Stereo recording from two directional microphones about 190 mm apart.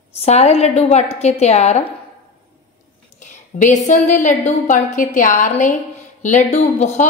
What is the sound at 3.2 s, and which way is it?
A woman's voice, 40° left (ahead or behind).